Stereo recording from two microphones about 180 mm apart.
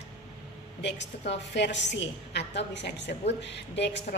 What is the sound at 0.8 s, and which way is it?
A woman's voice, 80° left.